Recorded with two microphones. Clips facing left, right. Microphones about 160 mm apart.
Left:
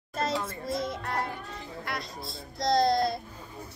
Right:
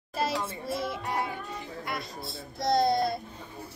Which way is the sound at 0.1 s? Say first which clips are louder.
Even; 10° right (ahead or behind).